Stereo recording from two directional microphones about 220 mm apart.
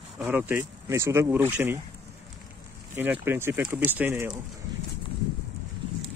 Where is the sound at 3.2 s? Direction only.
10° right (ahead or behind).